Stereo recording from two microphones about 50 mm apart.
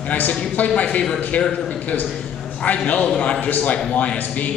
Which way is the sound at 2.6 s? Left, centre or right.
Left.